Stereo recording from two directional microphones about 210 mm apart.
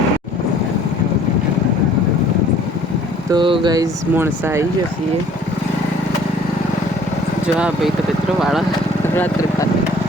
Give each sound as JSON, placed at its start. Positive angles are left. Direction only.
{"t": 3.3, "sound": "speech", "side_deg": -25}
{"t": 8.4, "sound": "speech", "side_deg": 0}
{"t": 9.1, "sound": "speech", "side_deg": 10}